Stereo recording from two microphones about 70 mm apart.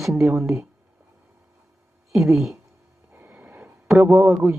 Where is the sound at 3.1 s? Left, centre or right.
Right.